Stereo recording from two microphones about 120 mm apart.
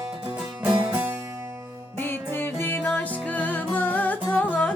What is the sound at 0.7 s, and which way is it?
Music, 15° right (ahead or behind).